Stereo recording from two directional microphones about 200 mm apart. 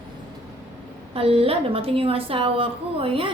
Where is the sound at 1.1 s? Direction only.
30° right (ahead or behind).